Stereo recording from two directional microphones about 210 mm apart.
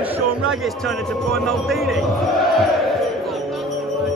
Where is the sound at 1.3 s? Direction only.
Centre (ahead or behind).